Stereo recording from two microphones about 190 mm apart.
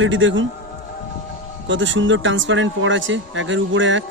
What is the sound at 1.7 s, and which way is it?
Speech, 80° right.